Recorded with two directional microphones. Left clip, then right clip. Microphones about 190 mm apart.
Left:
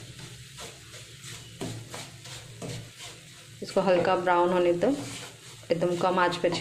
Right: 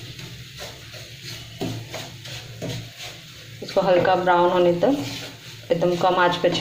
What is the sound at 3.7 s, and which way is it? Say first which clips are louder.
Speech: right 6 dB; 25° left (ahead or behind).